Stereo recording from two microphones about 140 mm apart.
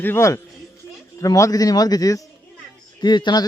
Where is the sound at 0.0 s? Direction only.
15° left (ahead or behind).